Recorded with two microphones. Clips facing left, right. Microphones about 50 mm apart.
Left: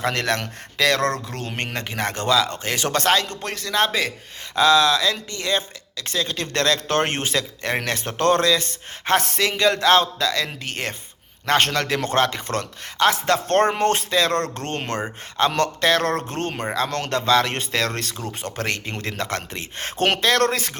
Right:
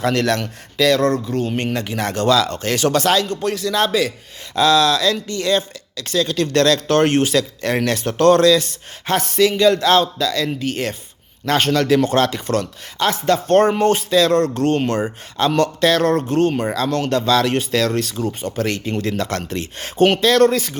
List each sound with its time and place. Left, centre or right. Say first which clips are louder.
0.0 s speech: right 4 dB; left
0.8 s a man's voice: right 5 dB; left
1.7 s speech: right 4 dB; left
2.2 s speech: right 4 dB; left
2.9 s speech: right 3 dB; left
9.1 s a man's voice: right 5 dB; left
13.1 s speech: right 4 dB; left
13.6 s a man's voice: right 4 dB; left
19.5 s speech: right 4 dB; left
20.0 s speech: right 6 dB; left